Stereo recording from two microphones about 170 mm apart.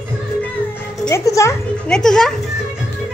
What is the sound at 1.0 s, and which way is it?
Music, 20° left (ahead or behind).